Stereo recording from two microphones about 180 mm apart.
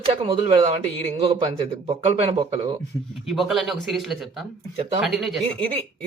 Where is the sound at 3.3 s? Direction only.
Centre (ahead or behind).